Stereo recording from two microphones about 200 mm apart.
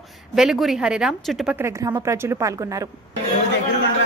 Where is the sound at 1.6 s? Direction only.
15° right (ahead or behind).